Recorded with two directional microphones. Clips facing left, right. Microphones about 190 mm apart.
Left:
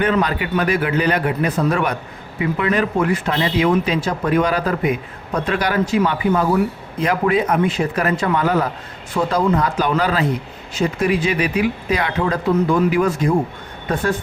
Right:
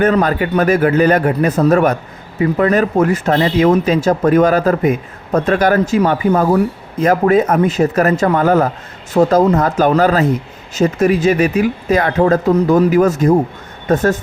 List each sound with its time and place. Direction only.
0.0 s speech: 45° right (ahead or behind)